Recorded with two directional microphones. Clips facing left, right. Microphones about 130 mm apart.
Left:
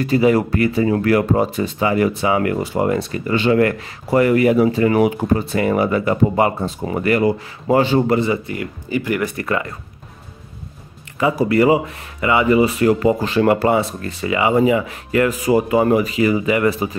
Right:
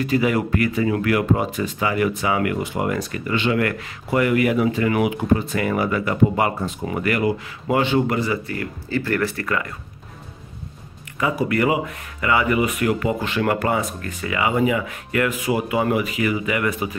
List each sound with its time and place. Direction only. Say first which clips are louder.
0.0 s speech: left 5 dB; 35° left (ahead or behind)
8.2 s speech: left 4 dB; 20° left (ahead or behind)
11.3 s speech: left 6 dB; 30° left (ahead or behind)